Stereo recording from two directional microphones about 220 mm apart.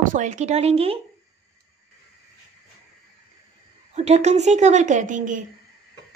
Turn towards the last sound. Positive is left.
turn(degrees=-35)  # may be behind; listen again after turning